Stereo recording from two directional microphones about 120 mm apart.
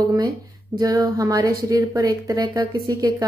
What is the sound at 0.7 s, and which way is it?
A woman's voice, 30° right (ahead or behind).